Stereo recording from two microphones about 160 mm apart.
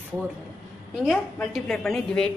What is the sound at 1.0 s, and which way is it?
A woman's voice, centre (ahead or behind).